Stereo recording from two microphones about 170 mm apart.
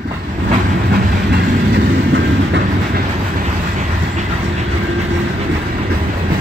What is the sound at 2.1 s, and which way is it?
Train, 90° right.